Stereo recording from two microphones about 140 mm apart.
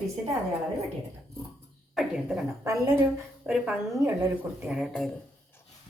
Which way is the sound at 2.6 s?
25° right (ahead or behind).